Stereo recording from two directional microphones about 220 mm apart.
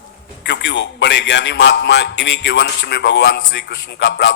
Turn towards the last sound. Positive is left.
turn(degrees=60)  # may be behind; listen again after turning